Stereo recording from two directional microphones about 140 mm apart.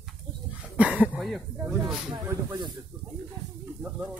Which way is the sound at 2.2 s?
25° right (ahead or behind).